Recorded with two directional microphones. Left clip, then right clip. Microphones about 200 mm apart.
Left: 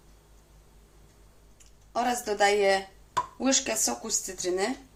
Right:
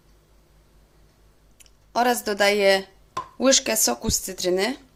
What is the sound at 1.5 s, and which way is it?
Speech, 45° right (ahead or behind).